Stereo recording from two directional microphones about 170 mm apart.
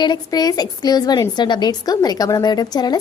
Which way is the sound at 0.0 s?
25° left (ahead or behind).